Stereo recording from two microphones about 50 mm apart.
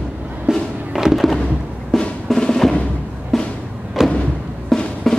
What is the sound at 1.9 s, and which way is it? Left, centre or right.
Drum, centre.